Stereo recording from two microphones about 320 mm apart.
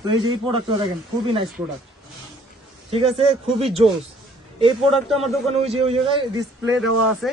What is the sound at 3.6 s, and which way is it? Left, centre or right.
Speech, centre.